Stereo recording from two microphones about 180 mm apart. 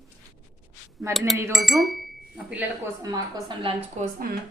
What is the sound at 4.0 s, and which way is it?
Speech, 40° right (ahead or behind).